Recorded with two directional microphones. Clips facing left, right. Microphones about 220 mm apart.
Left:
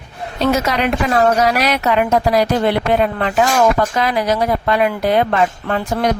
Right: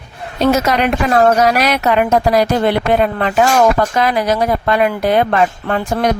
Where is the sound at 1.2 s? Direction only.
50° right (ahead or behind).